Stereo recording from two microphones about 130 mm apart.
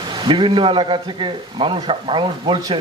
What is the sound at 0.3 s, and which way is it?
Speech, 40° right (ahead or behind).